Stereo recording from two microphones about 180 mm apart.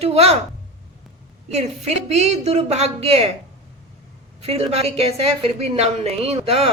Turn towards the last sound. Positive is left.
turn(degrees=-35)  # may be behind; listen again after turning